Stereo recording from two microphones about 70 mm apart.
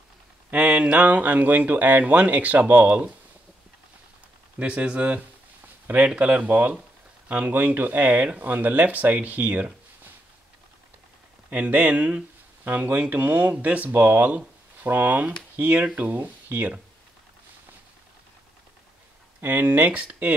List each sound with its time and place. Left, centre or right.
0.5 s speech: centre
4.6 s speech: centre
11.5 s speech: right
19.4 s speech: right